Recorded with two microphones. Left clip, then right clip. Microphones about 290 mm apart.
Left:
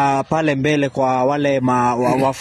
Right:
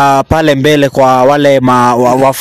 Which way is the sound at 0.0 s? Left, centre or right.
Right.